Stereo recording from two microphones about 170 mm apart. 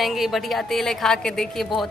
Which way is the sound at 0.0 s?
Centre (ahead or behind).